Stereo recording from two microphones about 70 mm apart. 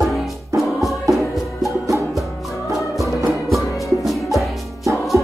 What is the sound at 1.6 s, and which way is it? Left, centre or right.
Music, right.